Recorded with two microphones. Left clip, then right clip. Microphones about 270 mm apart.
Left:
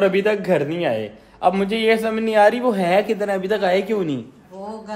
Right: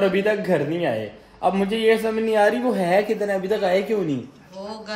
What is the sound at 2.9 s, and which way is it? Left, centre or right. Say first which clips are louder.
Speech: left 1 dB; centre.